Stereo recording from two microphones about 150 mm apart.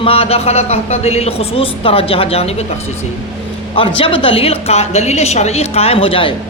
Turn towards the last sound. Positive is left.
turn(degrees=35)  # may be behind; listen again after turning